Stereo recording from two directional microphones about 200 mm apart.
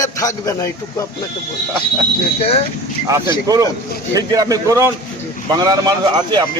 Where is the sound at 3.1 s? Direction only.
15° right (ahead or behind).